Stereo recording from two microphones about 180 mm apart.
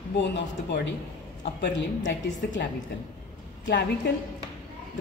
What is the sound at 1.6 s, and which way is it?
A woman's voice, 90° left.